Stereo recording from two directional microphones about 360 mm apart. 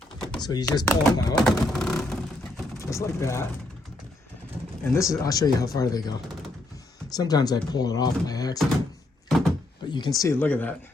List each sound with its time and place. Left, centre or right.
0.2 s speech: centre
4.9 s speech: centre
9.9 s speech: centre